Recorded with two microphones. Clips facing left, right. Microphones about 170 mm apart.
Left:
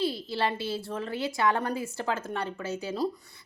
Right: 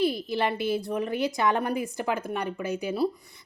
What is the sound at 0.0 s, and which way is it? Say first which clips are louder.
A woman's voice: right 3 dB; 15° right (ahead or behind).